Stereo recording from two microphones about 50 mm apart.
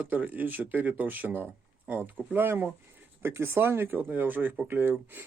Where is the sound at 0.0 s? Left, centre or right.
Right.